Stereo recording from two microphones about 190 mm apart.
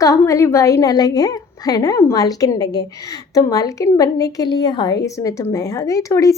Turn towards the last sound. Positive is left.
turn(degrees=15)  # may be behind; listen again after turning